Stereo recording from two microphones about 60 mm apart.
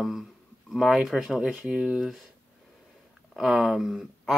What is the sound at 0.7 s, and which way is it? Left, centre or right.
Speech, centre.